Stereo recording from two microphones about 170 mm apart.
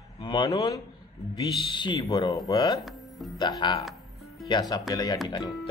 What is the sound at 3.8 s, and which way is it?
Music, centre (ahead or behind).